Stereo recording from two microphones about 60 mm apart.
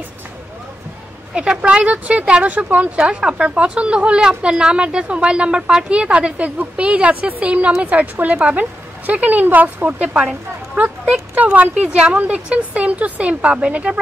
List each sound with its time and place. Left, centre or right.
1.3 s speech: centre
3.1 s a woman's voice: centre
11.7 s a woman's voice: centre